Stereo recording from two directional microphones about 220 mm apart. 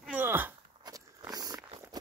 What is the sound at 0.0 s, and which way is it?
Walk, 10° right (ahead or behind).